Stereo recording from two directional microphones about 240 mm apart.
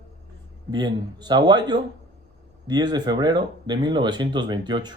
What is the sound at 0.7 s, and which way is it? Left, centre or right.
Speech, centre.